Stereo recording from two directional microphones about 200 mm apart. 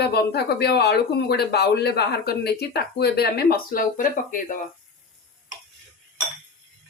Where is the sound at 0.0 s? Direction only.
55° left (ahead or behind).